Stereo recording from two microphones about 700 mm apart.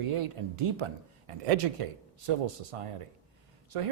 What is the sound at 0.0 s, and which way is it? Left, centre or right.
Speech, right.